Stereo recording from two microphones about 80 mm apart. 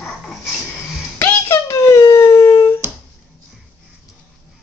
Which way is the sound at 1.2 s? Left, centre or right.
Left.